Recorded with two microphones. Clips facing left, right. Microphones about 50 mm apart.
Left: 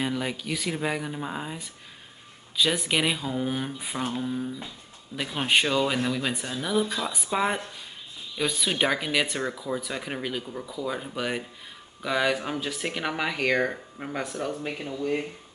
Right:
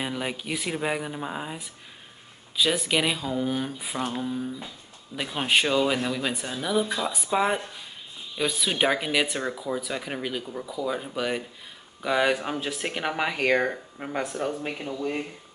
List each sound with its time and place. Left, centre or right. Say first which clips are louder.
0.0 s speech: left 1 dB; centre
12.0 s speech: right 2 dB; centre